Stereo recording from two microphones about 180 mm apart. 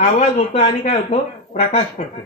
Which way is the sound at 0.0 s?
40° left (ahead or behind).